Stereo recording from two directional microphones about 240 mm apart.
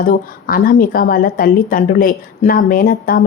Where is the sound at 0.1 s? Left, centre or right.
Left.